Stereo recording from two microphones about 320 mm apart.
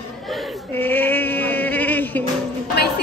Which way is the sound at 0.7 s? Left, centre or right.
Centre.